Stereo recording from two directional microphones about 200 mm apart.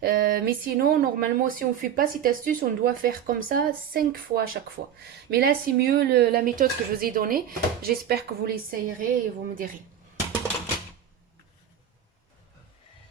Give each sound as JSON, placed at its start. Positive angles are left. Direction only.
{"t": 0.0, "sound": "speech", "side_deg": -50}